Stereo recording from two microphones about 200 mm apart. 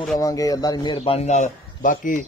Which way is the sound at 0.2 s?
15° left (ahead or behind).